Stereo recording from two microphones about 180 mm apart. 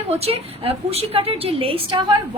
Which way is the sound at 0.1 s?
35° right (ahead or behind).